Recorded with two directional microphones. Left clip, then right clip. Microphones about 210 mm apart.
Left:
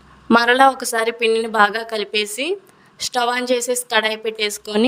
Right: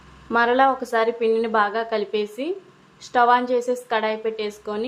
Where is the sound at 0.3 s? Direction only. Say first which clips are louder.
Left 5 dB; 55° left (ahead or behind).